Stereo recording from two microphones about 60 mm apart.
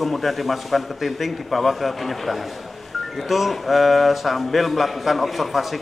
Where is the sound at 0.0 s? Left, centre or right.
Centre.